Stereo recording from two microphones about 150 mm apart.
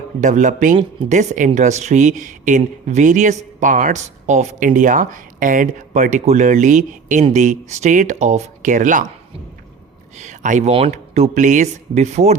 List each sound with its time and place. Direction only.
0.2 s speech: 55° right (ahead or behind)
10.2 s speech: 55° right (ahead or behind)